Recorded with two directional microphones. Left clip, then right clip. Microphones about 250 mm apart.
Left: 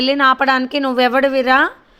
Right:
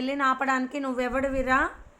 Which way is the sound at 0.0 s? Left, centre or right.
Left.